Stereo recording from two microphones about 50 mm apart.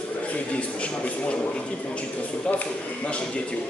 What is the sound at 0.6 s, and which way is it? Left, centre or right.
Speech, left.